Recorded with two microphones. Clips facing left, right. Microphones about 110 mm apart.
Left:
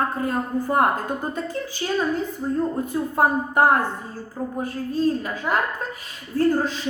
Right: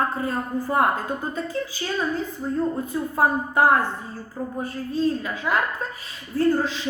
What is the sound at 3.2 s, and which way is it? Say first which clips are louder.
A woman's voice: left 1 dB; 50° left (ahead or behind).